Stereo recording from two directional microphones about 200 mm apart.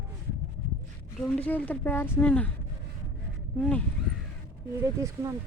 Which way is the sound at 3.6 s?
5° left (ahead or behind).